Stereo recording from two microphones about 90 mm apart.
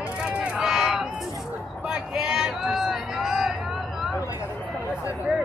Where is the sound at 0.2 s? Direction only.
10° right (ahead or behind).